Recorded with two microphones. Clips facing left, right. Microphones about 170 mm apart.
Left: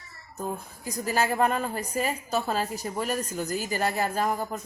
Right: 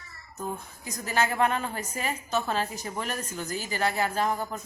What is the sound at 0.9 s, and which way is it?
A woman's voice, 35° left (ahead or behind).